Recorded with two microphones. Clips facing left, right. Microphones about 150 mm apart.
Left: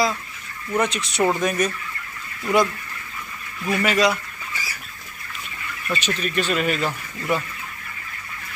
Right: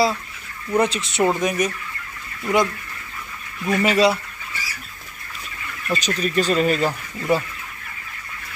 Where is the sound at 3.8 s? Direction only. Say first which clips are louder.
Right 3 dB; 30° right (ahead or behind).